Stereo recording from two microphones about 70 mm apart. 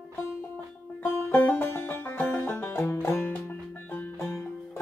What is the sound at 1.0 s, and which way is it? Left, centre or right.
Music, left.